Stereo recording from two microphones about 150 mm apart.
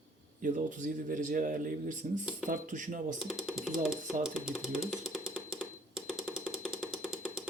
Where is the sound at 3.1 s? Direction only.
5° right (ahead or behind).